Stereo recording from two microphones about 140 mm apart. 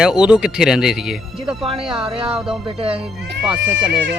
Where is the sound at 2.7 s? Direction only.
40° right (ahead or behind).